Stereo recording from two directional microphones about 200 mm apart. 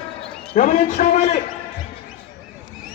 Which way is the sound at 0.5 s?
35° left (ahead or behind).